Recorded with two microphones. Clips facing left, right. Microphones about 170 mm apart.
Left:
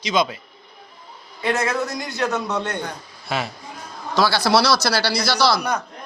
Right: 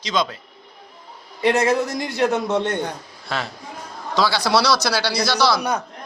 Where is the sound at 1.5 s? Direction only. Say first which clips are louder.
Right 4 dB; 20° right (ahead or behind).